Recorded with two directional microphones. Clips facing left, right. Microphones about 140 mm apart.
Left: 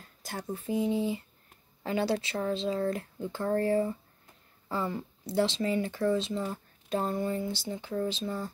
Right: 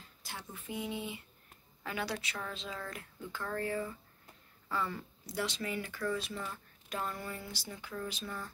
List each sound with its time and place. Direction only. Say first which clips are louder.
0.0 s speech: left 8 dB; 45° left (ahead or behind); by 6.4 s 25° left (ahead or behind)
6.4 s speech: left 8 dB; 35° left (ahead or behind)